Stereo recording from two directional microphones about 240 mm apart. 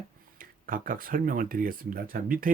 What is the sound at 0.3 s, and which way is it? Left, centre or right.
Speech, right.